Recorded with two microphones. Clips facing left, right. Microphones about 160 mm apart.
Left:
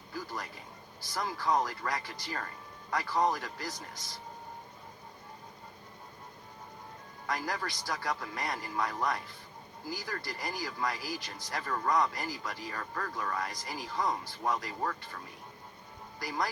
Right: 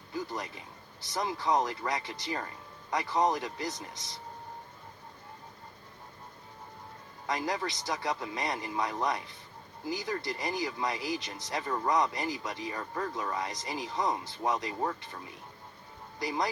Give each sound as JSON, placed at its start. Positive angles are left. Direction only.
{"t": 0.1, "sound": "a sound", "side_deg": -20}
{"t": 1.0, "sound": "speech", "side_deg": -20}
{"t": 7.3, "sound": "speech", "side_deg": -20}
{"t": 16.2, "sound": "speech", "side_deg": -20}